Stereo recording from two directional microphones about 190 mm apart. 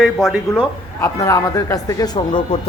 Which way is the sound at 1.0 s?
15° left (ahead or behind).